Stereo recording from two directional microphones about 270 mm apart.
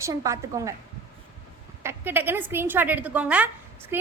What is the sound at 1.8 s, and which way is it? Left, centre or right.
A woman's voice, centre.